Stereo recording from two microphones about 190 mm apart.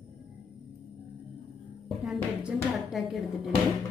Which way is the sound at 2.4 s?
Centre (ahead or behind).